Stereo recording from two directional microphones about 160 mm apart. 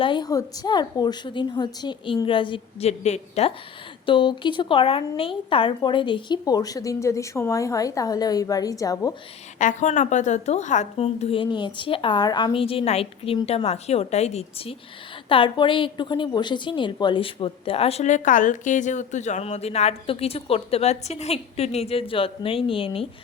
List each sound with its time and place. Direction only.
0.0 s a woman's voice: 30° left (ahead or behind)
3.0 s a woman's voice: 45° left (ahead or behind)
4.0 s a woman's voice: 30° left (ahead or behind)
9.6 s a woman's voice: 50° left (ahead or behind); by 23.0 s 35° left (ahead or behind)